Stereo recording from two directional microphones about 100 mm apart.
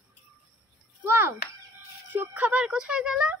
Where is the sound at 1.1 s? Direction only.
20° right (ahead or behind).